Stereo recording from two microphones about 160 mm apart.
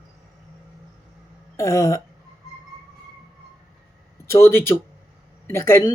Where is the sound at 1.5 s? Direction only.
15° left (ahead or behind).